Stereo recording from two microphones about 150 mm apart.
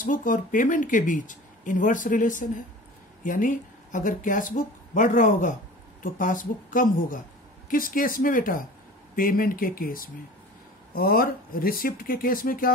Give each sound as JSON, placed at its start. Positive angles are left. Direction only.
{"t": 0.0, "sound": "speech", "side_deg": 65}